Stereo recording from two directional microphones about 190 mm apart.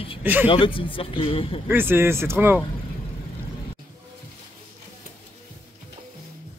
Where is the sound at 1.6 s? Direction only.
10° right (ahead or behind).